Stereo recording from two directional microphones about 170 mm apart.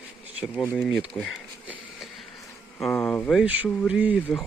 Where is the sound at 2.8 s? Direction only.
5° left (ahead or behind).